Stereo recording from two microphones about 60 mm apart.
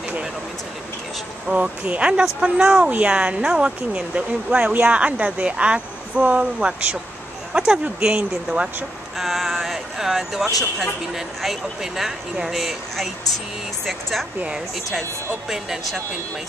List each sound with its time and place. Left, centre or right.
1.5 s speech: right
9.2 s speech: centre